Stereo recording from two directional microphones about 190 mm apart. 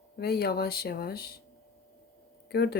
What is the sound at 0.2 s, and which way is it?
Speech, 55° left (ahead or behind).